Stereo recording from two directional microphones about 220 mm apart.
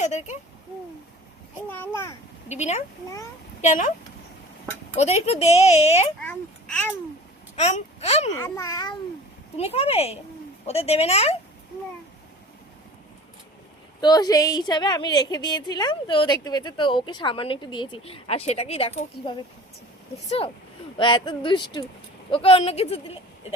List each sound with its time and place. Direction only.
0.0 s speech: 30° left (ahead or behind)
1.7 s a child's voice: 10° left (ahead or behind)
2.6 s speech: 30° left (ahead or behind)
4.9 s a woman's voice: 30° left (ahead or behind)
6.1 s a child's voice: 5° left (ahead or behind)
7.5 s a child's voice: 30° left (ahead or behind)
8.4 s a child's voice: 15° left (ahead or behind)
9.6 s a woman's voice: 30° left (ahead or behind)
14.0 s a woman's voice: 20° left (ahead or behind)
21.0 s a woman's voice: 20° left (ahead or behind)